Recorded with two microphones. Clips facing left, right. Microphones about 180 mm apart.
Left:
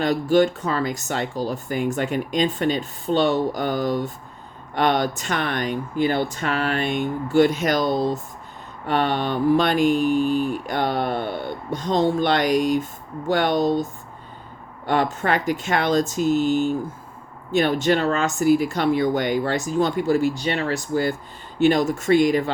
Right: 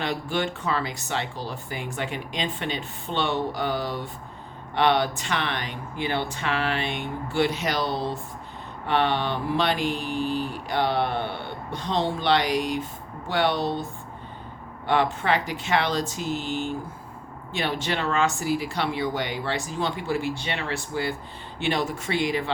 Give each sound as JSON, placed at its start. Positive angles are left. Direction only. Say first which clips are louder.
{"t": 0.0, "sound": "speech", "louder": "left 9 dB", "side_deg": 40}
{"t": 14.8, "sound": "speech", "louder": "left 2 dB", "side_deg": 45}